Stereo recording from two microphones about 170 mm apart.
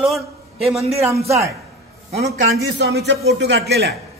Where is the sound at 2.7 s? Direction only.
80° right.